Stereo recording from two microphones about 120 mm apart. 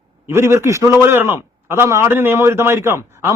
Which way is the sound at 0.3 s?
20° right (ahead or behind).